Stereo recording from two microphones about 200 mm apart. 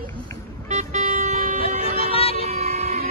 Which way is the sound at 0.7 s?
35° right (ahead or behind).